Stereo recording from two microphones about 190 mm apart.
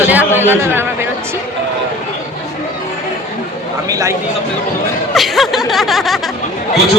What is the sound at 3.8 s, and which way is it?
Vehicle, 15° right (ahead or behind).